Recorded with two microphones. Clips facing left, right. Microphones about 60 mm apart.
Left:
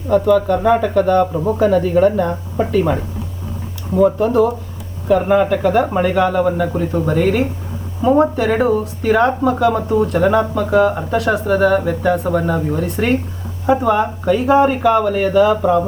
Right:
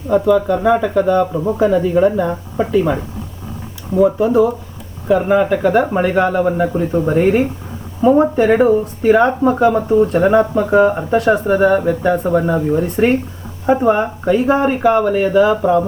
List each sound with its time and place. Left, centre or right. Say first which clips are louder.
0.1 s speech: even; centre
1.2 s speech: even; centre
1.5 s speech: even; centre
3.9 s speech: right 1 dB; centre
6.1 s speech: even; right